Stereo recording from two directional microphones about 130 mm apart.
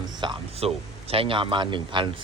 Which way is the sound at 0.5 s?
50° right (ahead or behind).